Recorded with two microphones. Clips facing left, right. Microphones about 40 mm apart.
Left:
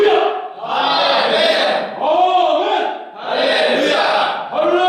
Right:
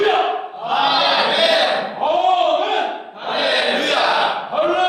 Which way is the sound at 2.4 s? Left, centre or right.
Centre.